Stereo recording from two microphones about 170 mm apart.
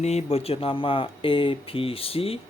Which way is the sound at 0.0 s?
40° left (ahead or behind).